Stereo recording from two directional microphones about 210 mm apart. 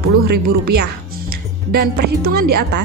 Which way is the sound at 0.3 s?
50° right (ahead or behind).